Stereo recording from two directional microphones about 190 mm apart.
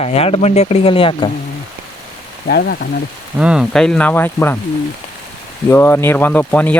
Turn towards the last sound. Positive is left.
turn(degrees=10)  # may be behind; listen again after turning